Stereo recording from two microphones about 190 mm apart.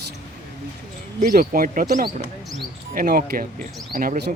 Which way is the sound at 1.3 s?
50° right (ahead or behind).